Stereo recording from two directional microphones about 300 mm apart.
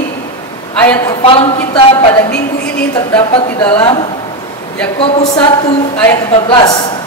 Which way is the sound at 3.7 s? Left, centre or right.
Centre.